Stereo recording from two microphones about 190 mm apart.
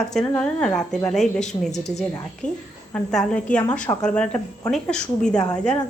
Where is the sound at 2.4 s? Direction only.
40° left (ahead or behind).